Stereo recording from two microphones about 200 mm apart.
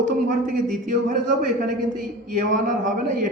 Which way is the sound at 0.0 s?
40° right (ahead or behind).